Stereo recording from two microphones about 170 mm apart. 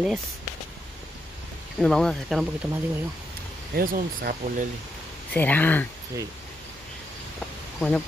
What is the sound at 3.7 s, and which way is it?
Speech, 55° right (ahead or behind).